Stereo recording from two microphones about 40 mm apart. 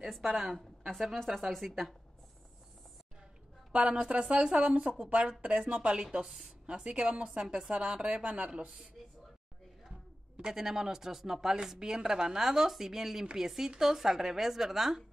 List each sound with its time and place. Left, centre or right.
0.1 s a woman's voice: centre
3.7 s speech: right
4.6 s a woman's voice: right; by 6.5 s centre
6.6 s speech: right
8.5 s speech: centre
10.3 s speech: centre